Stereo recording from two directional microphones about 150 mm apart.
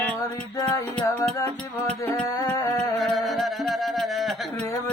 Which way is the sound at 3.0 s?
Centre (ahead or behind).